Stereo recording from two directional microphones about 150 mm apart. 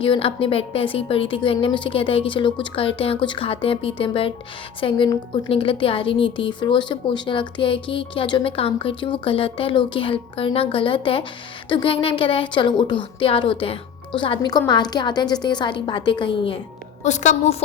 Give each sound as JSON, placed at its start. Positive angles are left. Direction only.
{"t": 0.0, "sound": "a woman's voice", "side_deg": 35}
{"t": 17.0, "sound": "a woman's voice", "side_deg": 50}